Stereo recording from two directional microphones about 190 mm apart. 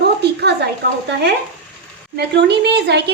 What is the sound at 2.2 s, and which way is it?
Speech, 60° right (ahead or behind).